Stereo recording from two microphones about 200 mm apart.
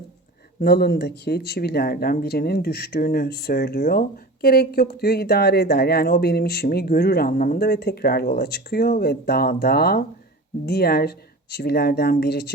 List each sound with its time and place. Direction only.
0.6 s speech: 55° left (ahead or behind)